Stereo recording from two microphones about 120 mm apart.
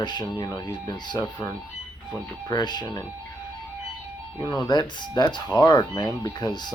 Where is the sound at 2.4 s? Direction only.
35° left (ahead or behind).